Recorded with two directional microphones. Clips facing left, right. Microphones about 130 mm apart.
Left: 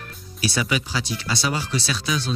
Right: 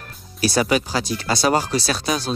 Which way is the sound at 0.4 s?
45° right (ahead or behind).